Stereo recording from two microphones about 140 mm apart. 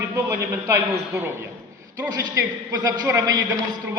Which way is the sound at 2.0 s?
25° right (ahead or behind).